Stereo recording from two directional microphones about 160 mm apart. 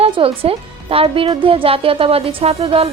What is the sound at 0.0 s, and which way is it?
A woman's voice, 35° right (ahead or behind).